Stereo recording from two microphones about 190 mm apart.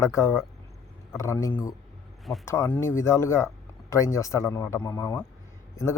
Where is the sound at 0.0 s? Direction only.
15° left (ahead or behind).